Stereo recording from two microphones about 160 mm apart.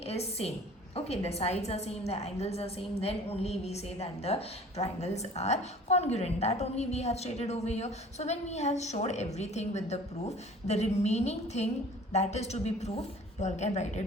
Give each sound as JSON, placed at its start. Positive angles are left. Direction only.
{"t": 0.0, "sound": "a woman's voice", "side_deg": 40}